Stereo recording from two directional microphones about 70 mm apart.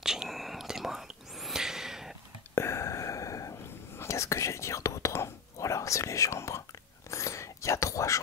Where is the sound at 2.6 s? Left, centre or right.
Left.